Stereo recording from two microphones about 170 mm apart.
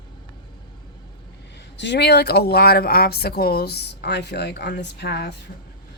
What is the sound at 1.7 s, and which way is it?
Speech, 90° left.